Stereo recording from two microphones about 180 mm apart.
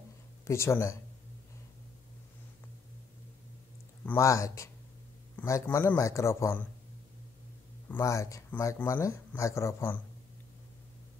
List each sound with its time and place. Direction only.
0.5 s speech: 15° left (ahead or behind)
4.0 s speech: 15° left (ahead or behind)
7.9 s speech: 15° left (ahead or behind)